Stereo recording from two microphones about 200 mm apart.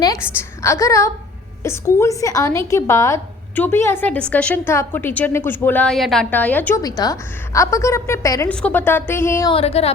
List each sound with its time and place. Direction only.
0.0 s a woman's voice: 20° left (ahead or behind)
9.5 s speech: 30° left (ahead or behind)